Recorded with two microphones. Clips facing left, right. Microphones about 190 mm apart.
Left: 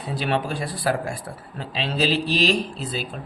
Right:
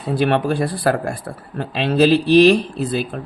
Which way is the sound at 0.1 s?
60° right (ahead or behind).